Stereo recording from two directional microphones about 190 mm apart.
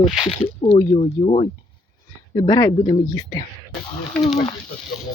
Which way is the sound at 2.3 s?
20° left (ahead or behind).